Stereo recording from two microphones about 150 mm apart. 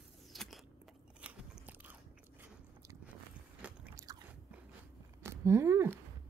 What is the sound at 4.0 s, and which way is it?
Biting, 25° right (ahead or behind).